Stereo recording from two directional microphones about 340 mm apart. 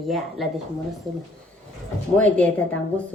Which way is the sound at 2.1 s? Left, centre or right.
Centre.